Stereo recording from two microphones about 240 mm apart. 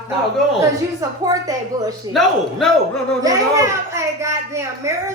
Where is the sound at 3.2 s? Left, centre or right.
Centre.